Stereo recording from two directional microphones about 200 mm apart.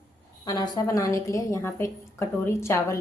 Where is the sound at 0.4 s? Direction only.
20° left (ahead or behind).